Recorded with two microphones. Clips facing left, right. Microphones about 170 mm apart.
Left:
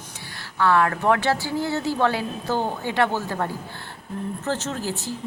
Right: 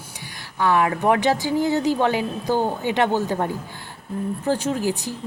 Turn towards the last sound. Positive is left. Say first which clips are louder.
# right 5 dB
turn(degrees=-15)  # may be behind; listen again after turning